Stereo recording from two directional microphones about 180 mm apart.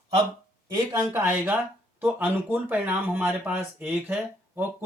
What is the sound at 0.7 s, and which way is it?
Speech, 20° right (ahead or behind).